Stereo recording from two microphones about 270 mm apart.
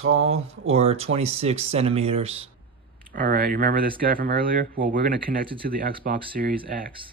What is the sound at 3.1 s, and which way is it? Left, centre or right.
Speech, right.